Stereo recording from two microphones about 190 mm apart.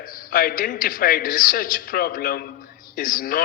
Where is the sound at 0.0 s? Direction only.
50° left (ahead or behind).